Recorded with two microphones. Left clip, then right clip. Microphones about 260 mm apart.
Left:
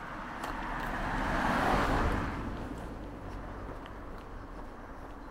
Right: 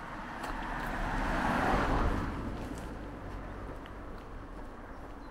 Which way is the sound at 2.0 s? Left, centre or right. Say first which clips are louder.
Left 2 dB; left.